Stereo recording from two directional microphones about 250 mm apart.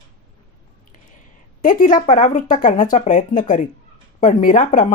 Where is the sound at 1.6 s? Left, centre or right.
Left.